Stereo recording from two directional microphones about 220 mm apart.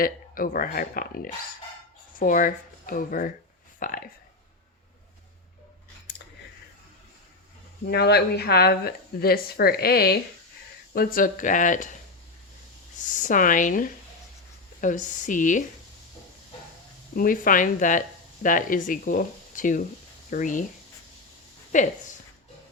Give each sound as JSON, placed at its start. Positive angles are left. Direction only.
{"t": 0.0, "sound": "speech", "side_deg": 40}
{"t": 7.9, "sound": "speech", "side_deg": 45}
{"t": 13.1, "sound": "speech", "side_deg": 35}
{"t": 17.2, "sound": "speech", "side_deg": 40}
{"t": 21.7, "sound": "a woman's voice", "side_deg": 35}